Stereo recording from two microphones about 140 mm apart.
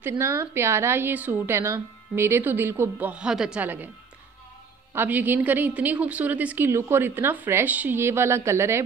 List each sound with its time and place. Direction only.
0.0 s a woman's voice: 20° right (ahead or behind)
4.9 s a woman's voice: 15° right (ahead or behind)